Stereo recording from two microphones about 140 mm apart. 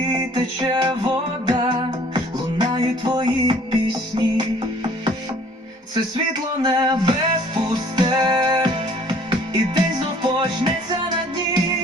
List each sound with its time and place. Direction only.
0.1 s music: 35° right (ahead or behind)
6.6 s music: 30° right (ahead or behind)